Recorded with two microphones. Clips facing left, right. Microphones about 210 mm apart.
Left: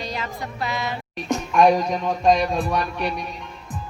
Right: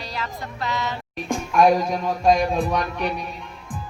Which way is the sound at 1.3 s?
5° right (ahead or behind).